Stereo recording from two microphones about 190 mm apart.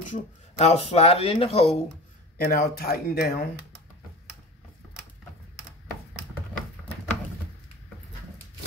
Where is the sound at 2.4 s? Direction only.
50° left (ahead or behind).